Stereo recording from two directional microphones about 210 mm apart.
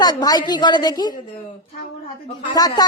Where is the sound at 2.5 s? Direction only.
20° left (ahead or behind).